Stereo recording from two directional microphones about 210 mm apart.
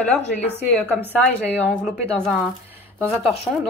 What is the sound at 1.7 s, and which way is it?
Speech, centre (ahead or behind).